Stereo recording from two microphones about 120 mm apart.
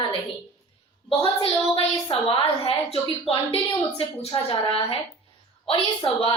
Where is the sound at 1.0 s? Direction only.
50° left (ahead or behind).